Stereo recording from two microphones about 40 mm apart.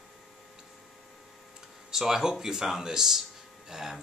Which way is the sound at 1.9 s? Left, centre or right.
Centre.